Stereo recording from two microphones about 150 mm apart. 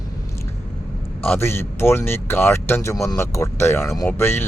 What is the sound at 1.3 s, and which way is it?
Speech, 15° left (ahead or behind).